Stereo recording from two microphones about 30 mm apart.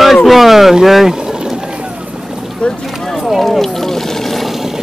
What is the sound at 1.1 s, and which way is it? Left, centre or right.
Boat, right.